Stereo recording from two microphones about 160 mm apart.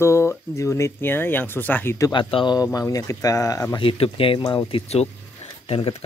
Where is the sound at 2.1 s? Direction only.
30° left (ahead or behind).